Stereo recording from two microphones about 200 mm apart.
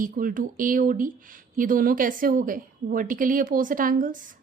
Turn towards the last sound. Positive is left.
turn(degrees=-40)  # may be behind; listen again after turning